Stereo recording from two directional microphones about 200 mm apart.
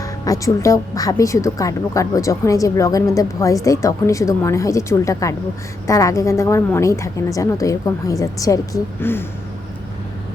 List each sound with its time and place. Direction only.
0.0 s a woman's voice: 15° left (ahead or behind)